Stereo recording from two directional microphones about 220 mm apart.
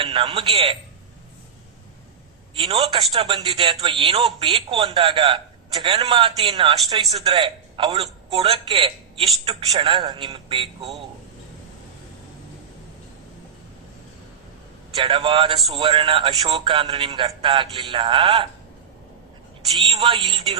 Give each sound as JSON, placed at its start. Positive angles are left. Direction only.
{"t": 0.0, "sound": "a man's voice", "side_deg": -20}
{"t": 2.6, "sound": "a man's voice", "side_deg": -25}
{"t": 14.9, "sound": "a man's voice", "side_deg": -25}
{"t": 19.9, "sound": "a man's voice", "side_deg": -20}